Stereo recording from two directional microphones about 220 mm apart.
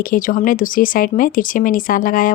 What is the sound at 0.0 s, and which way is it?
Speech, 40° left (ahead or behind).